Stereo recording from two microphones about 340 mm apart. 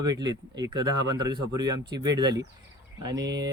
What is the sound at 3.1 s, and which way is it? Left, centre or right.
Speech, right.